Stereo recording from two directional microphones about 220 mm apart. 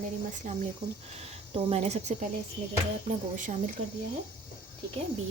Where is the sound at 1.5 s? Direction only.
30° right (ahead or behind).